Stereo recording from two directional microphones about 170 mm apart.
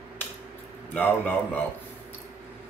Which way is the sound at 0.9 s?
10° left (ahead or behind).